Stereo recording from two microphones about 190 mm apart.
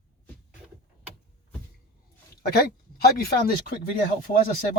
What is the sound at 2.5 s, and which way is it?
Speech, 55° left (ahead or behind).